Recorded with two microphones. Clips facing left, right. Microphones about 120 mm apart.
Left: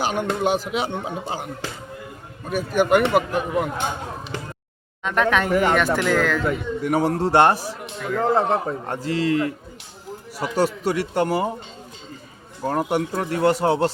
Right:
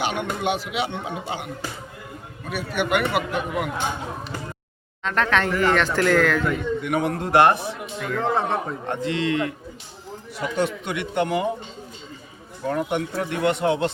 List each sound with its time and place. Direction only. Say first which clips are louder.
0.0 s speech: left 3 dB; 40° left (ahead or behind)
2.6 s speech: left 5 dB; 40° left (ahead or behind)
5.0 s speech: left 2 dB; 10° left (ahead or behind)
6.8 s speech: left 4 dB; 35° left (ahead or behind)
7.9 s speech: left 3 dB; 5° left (ahead or behind)
8.2 s speech: left 4 dB; 35° left (ahead or behind)
12.6 s speech: left 2 dB; 35° left (ahead or behind)